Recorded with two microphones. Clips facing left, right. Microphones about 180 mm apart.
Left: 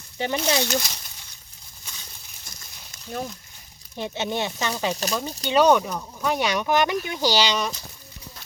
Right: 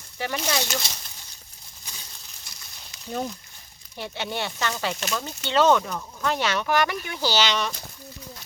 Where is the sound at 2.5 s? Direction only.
50° left (ahead or behind).